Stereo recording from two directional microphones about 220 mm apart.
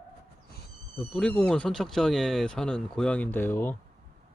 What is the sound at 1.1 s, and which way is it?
Speech, 5° left (ahead or behind).